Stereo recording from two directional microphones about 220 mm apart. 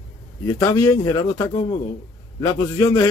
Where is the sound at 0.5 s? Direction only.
15° left (ahead or behind).